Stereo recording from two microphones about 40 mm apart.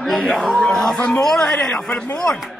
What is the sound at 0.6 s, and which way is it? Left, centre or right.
A man's voice, centre.